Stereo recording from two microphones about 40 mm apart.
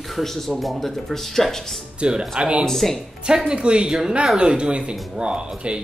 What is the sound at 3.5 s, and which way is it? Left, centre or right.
Speech, right.